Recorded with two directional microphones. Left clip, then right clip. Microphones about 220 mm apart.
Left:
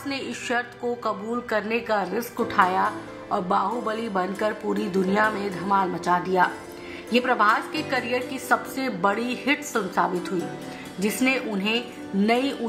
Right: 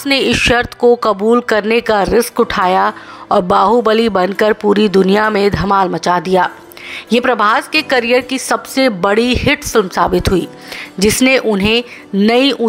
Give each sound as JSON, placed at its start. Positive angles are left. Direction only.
{"t": 0.0, "sound": "speech", "side_deg": -45}